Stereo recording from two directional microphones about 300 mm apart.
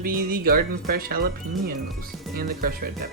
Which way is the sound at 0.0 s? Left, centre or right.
Right.